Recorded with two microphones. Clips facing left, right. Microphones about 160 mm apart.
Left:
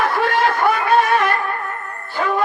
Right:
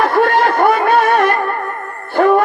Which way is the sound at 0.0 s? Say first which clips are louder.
Right 5 dB; 50° right (ahead or behind).